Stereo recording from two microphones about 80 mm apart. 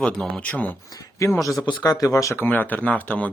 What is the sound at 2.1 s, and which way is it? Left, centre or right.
Speech, left.